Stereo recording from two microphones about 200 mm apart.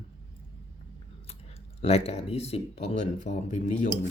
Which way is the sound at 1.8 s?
30° left (ahead or behind).